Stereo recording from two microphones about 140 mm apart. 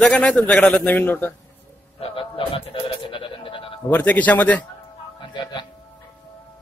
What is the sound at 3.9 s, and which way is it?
Speech, 10° left (ahead or behind).